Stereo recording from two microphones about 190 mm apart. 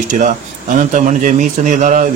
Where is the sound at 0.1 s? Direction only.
40° right (ahead or behind).